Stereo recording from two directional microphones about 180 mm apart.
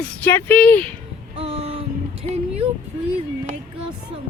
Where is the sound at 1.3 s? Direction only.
30° right (ahead or behind).